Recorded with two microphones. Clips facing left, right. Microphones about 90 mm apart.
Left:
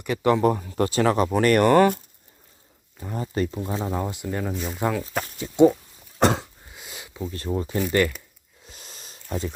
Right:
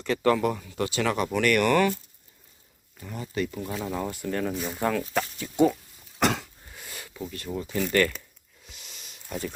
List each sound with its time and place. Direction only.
0.0 s speech: 15° left (ahead or behind)
0.4 s speech: 40° left (ahead or behind)
3.0 s speech: 35° left (ahead or behind)
3.6 s speech: 25° left (ahead or behind)
4.5 s speech: centre (ahead or behind)
5.4 s speech: 20° left (ahead or behind)
6.1 s throat clearing: 30° left (ahead or behind)
6.7 s a sound: 20° left (ahead or behind)
7.3 s speech: 30° left (ahead or behind)
7.8 s speech: 15° left (ahead or behind)
8.6 s a sound: 40° left (ahead or behind)